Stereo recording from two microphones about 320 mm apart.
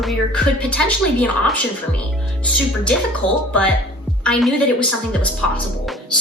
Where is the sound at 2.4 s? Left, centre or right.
Centre.